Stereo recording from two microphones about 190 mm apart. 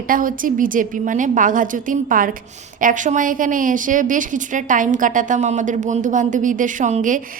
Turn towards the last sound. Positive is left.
turn(degrees=-40)  # may be behind; listen again after turning